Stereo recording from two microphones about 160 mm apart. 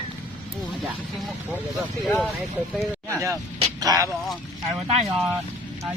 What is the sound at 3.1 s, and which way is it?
Speech, 20° right (ahead or behind).